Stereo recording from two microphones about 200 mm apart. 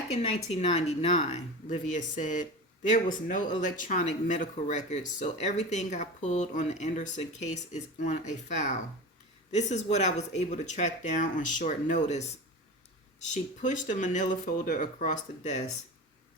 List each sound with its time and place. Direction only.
0.1 s speech: 30° left (ahead or behind)